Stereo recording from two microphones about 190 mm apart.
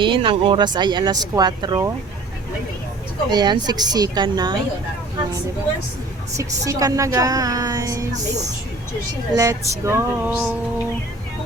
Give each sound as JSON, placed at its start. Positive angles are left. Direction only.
{"t": 0.0, "sound": "speech", "side_deg": -25}
{"t": 3.2, "sound": "speech", "side_deg": -25}
{"t": 6.3, "sound": "music", "side_deg": -15}
{"t": 8.1, "sound": "speech", "side_deg": -35}
{"t": 9.3, "sound": "music", "side_deg": -15}